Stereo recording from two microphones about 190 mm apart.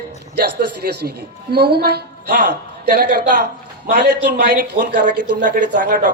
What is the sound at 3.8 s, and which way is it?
A man's voice, 65° right (ahead or behind).